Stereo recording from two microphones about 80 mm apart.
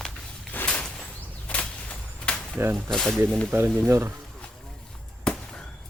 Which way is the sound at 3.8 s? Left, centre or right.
Right.